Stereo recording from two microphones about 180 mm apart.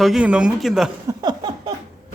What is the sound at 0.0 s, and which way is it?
Speech, 5° right (ahead or behind).